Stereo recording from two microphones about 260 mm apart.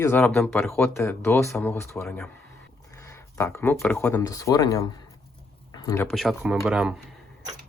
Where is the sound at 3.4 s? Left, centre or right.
Centre.